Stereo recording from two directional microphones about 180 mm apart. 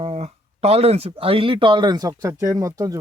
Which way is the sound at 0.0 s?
35° right (ahead or behind).